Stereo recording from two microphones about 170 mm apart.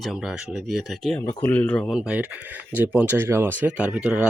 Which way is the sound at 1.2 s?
15° left (ahead or behind).